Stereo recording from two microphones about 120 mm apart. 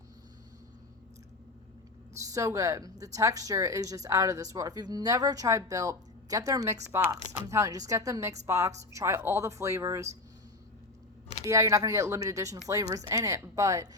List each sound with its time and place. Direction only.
2.1 s speech: 25° right (ahead or behind)
11.4 s speech: 25° right (ahead or behind)